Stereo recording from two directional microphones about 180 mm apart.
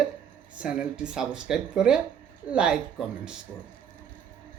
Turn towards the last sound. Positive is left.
turn(degrees=-5)  # may be behind; listen again after turning